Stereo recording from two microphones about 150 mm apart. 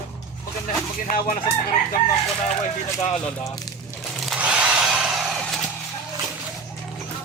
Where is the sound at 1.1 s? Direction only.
70° left (ahead or behind).